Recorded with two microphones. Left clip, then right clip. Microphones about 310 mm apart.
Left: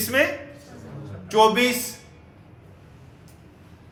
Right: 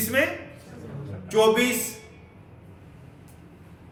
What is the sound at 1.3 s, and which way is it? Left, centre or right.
Speech, left.